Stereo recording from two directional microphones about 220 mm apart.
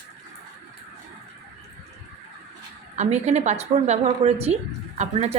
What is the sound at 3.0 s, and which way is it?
A woman's voice, 30° right (ahead or behind).